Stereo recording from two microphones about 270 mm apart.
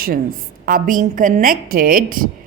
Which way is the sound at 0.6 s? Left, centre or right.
Right.